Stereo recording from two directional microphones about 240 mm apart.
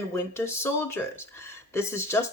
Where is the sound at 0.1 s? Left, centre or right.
Centre.